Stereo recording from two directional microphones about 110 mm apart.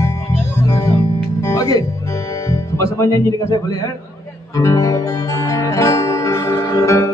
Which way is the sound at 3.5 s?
35° left (ahead or behind).